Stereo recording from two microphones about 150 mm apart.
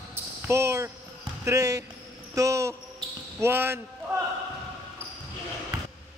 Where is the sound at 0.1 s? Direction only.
15° right (ahead or behind).